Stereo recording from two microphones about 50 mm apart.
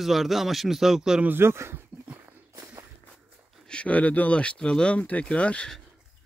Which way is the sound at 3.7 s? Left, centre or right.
Left.